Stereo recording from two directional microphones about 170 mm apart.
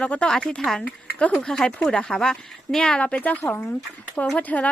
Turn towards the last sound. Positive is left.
turn(degrees=10)  # may be behind; listen again after turning